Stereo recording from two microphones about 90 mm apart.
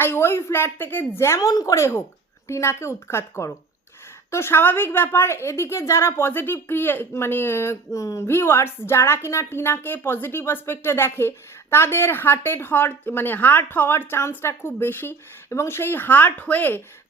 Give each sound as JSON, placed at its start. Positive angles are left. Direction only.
{"t": 0.0, "sound": "a woman's voice", "side_deg": 25}
{"t": 1.4, "sound": "a woman's voice", "side_deg": 40}